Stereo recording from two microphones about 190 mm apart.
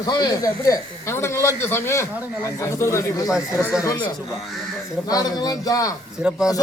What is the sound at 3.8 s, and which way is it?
Speech, 20° left (ahead or behind).